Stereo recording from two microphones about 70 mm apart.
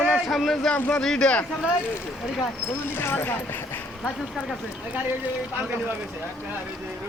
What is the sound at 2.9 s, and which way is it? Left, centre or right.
Speech, left.